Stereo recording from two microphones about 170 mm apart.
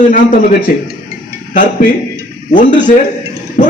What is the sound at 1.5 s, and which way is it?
Speech, 50° left (ahead or behind).